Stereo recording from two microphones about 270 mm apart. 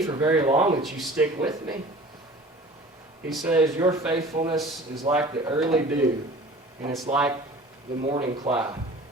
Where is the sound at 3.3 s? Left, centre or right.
Centre.